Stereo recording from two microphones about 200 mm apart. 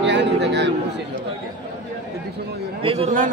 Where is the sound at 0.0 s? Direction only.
60° right (ahead or behind).